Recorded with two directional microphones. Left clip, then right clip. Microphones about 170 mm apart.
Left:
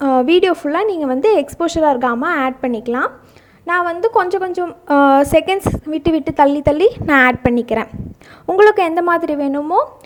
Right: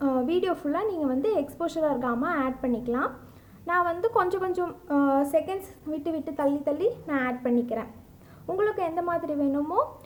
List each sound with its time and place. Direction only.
0.0 s a woman's voice: 40° left (ahead or behind); by 4.7 s 25° left (ahead or behind)
4.9 s a woman's voice: 50° left (ahead or behind)